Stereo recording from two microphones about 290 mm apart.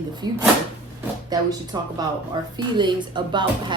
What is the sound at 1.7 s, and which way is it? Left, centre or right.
Speech, centre.